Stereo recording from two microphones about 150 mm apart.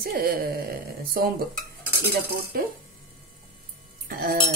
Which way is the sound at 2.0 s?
90° right.